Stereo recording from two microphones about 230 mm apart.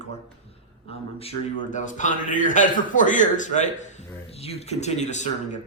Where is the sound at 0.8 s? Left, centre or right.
Left.